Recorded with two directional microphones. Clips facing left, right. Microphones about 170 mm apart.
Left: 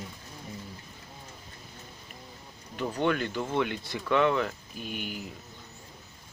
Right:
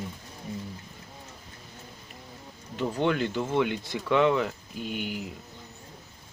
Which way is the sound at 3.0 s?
20° right (ahead or behind).